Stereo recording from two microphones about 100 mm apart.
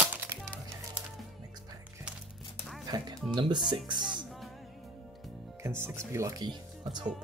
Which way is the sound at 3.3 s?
50° right (ahead or behind).